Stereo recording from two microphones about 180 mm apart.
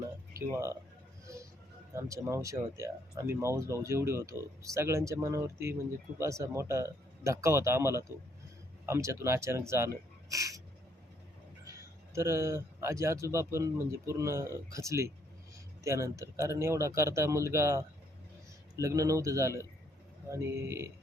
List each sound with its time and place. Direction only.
0.5 s speech: 15° right (ahead or behind)
2.0 s speech: 15° right (ahead or behind)
11.6 s speech: 15° right (ahead or behind)